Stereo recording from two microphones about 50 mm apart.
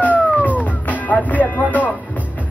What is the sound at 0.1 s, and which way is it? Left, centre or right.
Music, right.